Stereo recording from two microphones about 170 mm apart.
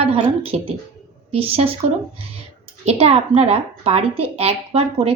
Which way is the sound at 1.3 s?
35° right (ahead or behind).